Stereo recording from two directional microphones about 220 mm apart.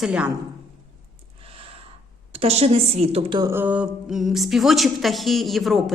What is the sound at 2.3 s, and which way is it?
A woman's voice, 30° right (ahead or behind).